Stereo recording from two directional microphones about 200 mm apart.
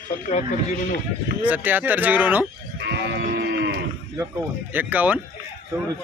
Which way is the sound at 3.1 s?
60° right (ahead or behind).